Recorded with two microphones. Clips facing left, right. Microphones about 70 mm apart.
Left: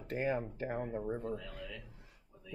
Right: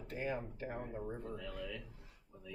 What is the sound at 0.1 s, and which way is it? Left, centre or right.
Speech, left.